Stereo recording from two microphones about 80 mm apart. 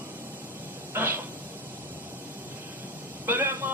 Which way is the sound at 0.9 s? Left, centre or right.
Right.